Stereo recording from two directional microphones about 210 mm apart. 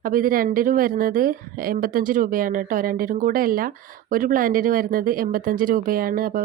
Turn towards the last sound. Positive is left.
turn(degrees=-40)  # may be behind; listen again after turning